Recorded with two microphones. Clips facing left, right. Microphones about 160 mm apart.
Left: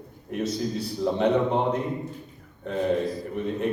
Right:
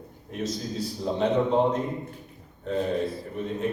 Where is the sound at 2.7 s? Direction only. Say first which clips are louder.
Right 2 dB; 65° left (ahead or behind).